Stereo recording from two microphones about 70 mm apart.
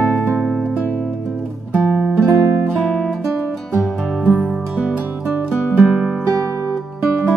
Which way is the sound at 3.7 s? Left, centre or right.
Centre.